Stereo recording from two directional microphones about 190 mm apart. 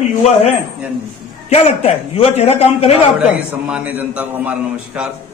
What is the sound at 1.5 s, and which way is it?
A man's voice, 30° left (ahead or behind).